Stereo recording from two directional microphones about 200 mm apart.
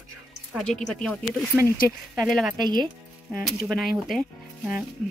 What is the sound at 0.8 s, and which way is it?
Speech, centre (ahead or behind).